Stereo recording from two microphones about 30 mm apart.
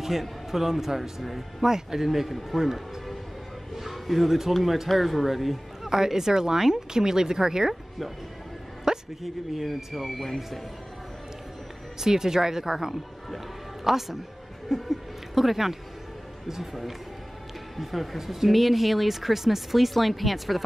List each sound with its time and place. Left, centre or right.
0.0 s speech: centre
2.0 s speech: centre
3.7 s speech: centre
5.9 s speech: centre
8.9 s a sound: right
9.2 s speech: centre
12.0 s speech: centre
17.7 s speech: centre